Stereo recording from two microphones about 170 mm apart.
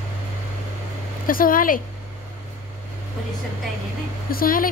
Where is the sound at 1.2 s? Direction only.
55° left (ahead or behind).